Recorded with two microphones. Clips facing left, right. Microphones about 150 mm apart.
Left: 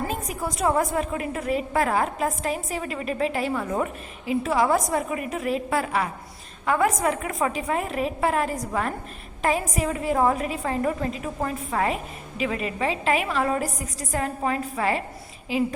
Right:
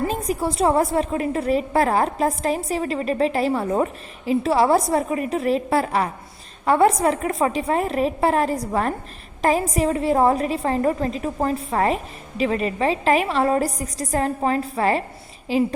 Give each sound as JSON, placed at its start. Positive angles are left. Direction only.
{"t": 0.1, "sound": "a woman's voice", "side_deg": -30}